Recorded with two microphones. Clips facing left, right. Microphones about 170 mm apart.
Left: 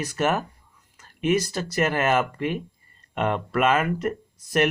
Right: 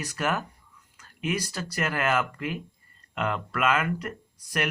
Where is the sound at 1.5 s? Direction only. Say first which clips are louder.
Left 6 dB; 30° left (ahead or behind).